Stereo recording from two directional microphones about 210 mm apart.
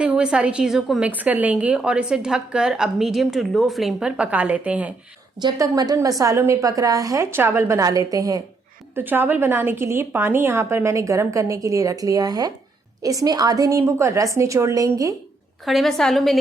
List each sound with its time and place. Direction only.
0.0 s a woman's voice: 5° right (ahead or behind)
5.4 s a woman's voice: 15° right (ahead or behind)
15.6 s a woman's voice: centre (ahead or behind)